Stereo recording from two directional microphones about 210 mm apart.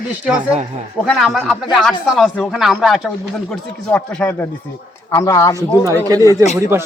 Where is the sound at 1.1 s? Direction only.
Centre (ahead or behind).